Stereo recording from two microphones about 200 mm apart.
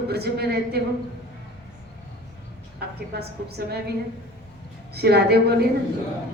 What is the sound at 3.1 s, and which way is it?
Speech, 55° right (ahead or behind).